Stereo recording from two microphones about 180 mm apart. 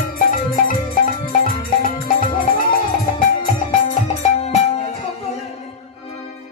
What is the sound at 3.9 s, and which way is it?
Music, 40° left (ahead or behind).